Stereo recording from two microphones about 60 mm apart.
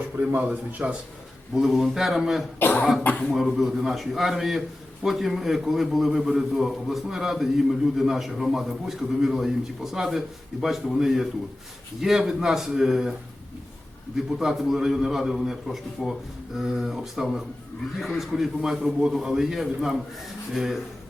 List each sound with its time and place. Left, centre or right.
0.3 s speech: right
1.5 s a man's voice: centre
2.6 s speech: left
3.3 s a man's voice: centre
14.3 s a man's voice: centre